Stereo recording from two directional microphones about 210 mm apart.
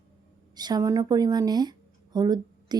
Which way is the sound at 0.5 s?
20° right (ahead or behind).